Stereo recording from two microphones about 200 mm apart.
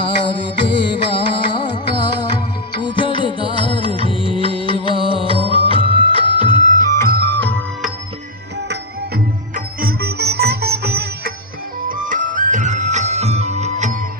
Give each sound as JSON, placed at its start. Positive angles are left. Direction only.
{"t": 0.0, "sound": "music", "side_deg": 25}
{"t": 9.6, "sound": "music", "side_deg": -50}
{"t": 11.9, "sound": "music", "side_deg": -40}